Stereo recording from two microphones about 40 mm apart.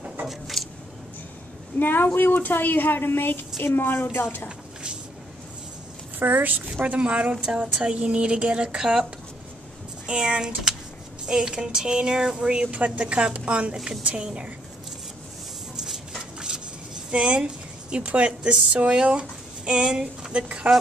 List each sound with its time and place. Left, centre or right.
0.3 s a sound: centre
1.8 s a woman's voice: left
6.1 s speech: right
7.0 s a woman's voice: right
10.0 s speech: right
16.3 s a sound: centre
17.9 s a woman's voice: right